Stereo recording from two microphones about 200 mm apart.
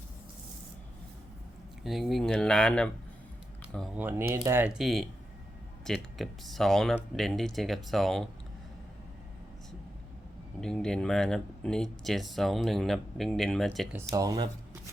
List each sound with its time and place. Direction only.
1.8 s speech: centre (ahead or behind)
3.9 s speech: 10° right (ahead or behind)
10.6 s speech: 5° left (ahead or behind)
13.9 s speech: 15° right (ahead or behind)